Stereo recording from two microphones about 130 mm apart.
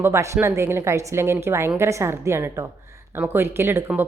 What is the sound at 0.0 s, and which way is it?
A woman's voice, 20° right (ahead or behind).